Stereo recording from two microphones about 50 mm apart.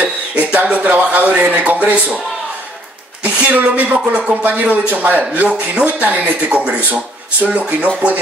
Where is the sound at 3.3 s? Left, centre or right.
Right.